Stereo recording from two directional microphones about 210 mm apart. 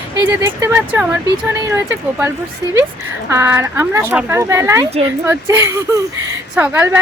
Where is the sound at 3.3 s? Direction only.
15° right (ahead or behind).